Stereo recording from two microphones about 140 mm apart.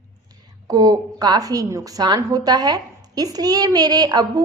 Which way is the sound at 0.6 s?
25° right (ahead or behind).